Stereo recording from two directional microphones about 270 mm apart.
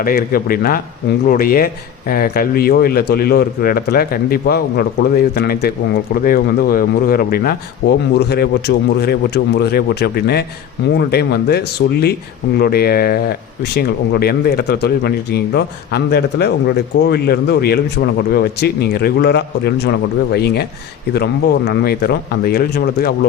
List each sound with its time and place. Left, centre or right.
0.0 s speech: left